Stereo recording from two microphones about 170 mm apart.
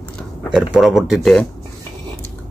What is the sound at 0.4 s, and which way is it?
Speech, centre (ahead or behind).